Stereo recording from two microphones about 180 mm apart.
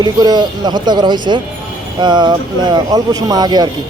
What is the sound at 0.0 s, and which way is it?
Speech, 25° right (ahead or behind).